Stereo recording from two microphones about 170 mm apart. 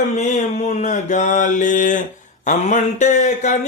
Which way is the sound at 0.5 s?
40° left (ahead or behind).